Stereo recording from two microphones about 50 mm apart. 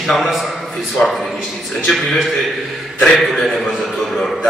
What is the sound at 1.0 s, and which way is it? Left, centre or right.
Speech, left.